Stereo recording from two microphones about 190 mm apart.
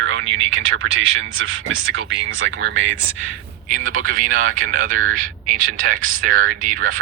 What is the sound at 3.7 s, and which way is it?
Speech, 45° right (ahead or behind).